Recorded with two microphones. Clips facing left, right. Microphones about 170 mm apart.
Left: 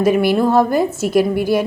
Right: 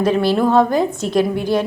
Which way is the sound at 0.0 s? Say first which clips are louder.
Left 1 dB; 10° left (ahead or behind).